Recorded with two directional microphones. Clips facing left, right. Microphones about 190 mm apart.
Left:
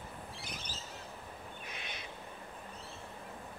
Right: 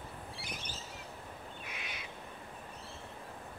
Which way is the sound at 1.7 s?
35° left (ahead or behind).